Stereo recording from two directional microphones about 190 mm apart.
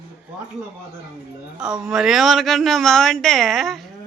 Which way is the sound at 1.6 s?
5° right (ahead or behind).